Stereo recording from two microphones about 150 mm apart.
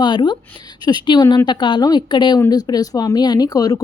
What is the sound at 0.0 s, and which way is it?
A woman's voice, 30° left (ahead or behind).